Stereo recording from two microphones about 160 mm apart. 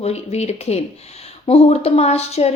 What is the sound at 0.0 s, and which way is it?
A woman's voice, 40° left (ahead or behind).